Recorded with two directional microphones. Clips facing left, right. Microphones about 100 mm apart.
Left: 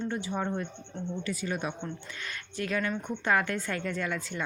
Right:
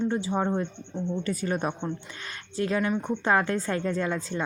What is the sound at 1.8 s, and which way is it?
A woman's voice, 30° right (ahead or behind).